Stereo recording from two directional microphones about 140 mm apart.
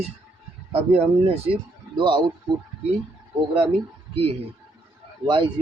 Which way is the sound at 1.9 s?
35° right (ahead or behind).